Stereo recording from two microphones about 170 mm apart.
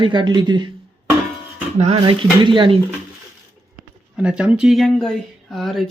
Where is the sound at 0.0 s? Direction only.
25° right (ahead or behind).